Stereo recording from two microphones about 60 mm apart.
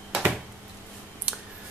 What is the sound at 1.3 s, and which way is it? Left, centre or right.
Clicking, centre.